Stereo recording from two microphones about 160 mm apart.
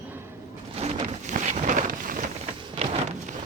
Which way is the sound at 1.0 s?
50° right (ahead or behind).